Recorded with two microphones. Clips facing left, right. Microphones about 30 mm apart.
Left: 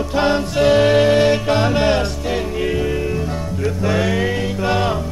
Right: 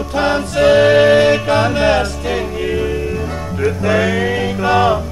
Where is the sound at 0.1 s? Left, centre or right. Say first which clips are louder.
Right 2 dB; centre.